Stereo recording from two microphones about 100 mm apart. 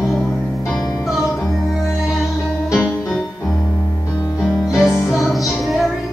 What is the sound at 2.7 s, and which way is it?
Music, 30° left (ahead or behind).